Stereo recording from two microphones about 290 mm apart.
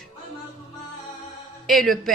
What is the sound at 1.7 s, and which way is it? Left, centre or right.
Speech, centre.